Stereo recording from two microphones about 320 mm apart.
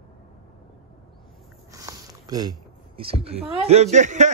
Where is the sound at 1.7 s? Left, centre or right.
Centre.